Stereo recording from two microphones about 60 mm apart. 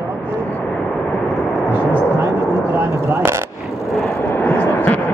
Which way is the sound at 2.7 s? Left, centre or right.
Right.